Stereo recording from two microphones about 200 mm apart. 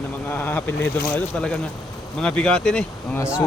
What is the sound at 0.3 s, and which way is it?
Speech, 10° left (ahead or behind).